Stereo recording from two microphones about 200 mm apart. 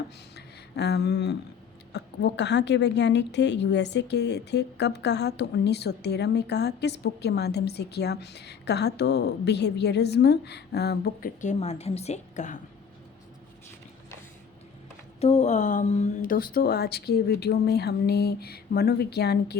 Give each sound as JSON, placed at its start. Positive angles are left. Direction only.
{"t": 0.3, "sound": "a sound", "side_deg": 55}
{"t": 1.9, "sound": "a woman's voice", "side_deg": 60}
{"t": 15.2, "sound": "speech", "side_deg": 35}